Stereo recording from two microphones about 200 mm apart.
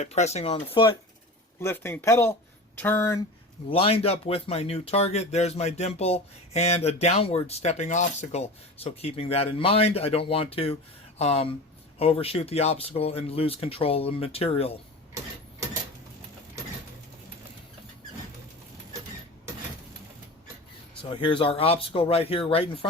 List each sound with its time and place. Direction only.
0.0 s speech: 35° left (ahead or behind)
1.6 s speech: 10° left (ahead or behind)
3.7 s speech: 30° left (ahead or behind)
21.0 s speech: 25° left (ahead or behind)